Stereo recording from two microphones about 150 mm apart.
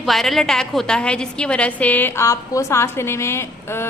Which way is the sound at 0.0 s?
Centre (ahead or behind).